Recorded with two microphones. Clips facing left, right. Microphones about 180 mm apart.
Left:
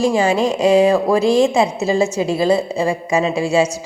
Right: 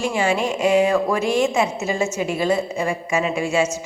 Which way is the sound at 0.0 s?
35° left (ahead or behind).